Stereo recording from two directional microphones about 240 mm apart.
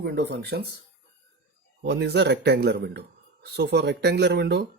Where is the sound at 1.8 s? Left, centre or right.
Right.